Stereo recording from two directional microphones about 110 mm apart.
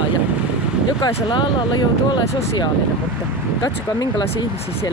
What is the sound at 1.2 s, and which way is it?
Speech, 45° left (ahead or behind).